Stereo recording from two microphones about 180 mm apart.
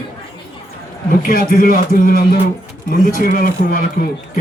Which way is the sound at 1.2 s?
50° left (ahead or behind).